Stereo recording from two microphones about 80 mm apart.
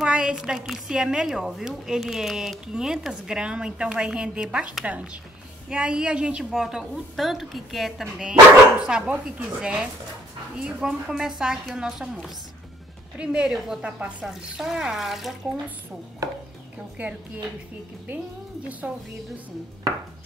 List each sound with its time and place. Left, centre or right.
0.0 s a woman's voice: centre
13.2 s speech: centre
17.0 s a woman's voice: right